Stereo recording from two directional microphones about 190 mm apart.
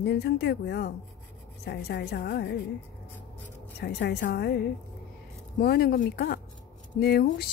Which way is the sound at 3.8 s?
60° left (ahead or behind).